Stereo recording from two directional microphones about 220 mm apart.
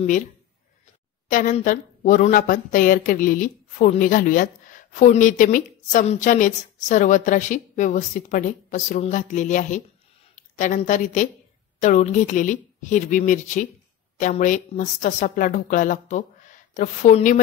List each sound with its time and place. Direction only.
1.3 s a woman's voice: 35° left (ahead or behind)